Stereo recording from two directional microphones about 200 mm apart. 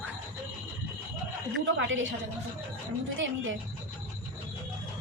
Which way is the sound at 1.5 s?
70° right (ahead or behind).